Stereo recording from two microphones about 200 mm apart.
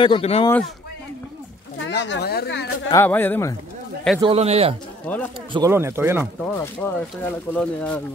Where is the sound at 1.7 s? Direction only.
65° left (ahead or behind).